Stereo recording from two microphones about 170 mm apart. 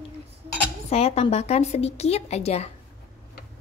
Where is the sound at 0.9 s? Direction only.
35° left (ahead or behind).